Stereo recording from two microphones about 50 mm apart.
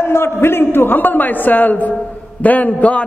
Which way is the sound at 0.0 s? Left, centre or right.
Left.